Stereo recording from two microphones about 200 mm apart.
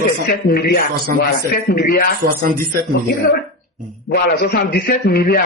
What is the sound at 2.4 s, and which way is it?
Speech, 45° right (ahead or behind).